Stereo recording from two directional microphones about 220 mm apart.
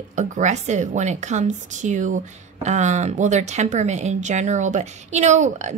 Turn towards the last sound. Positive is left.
turn(degrees=-30)  # may be behind; listen again after turning